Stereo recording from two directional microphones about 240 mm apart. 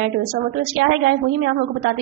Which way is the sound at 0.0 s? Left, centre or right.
Right.